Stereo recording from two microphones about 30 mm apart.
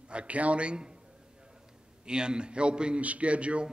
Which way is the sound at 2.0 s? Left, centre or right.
Right.